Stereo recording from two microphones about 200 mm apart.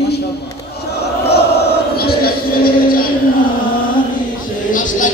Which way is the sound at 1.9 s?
50° left (ahead or behind).